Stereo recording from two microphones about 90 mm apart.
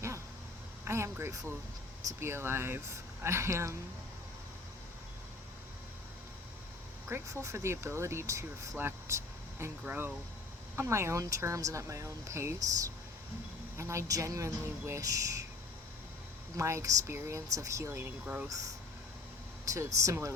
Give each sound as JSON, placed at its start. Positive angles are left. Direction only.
{"t": 0.9, "sound": "speech", "side_deg": -30}
{"t": 7.1, "sound": "speech", "side_deg": -30}
{"t": 9.8, "sound": "speech", "side_deg": -20}
{"t": 16.6, "sound": "speech", "side_deg": -35}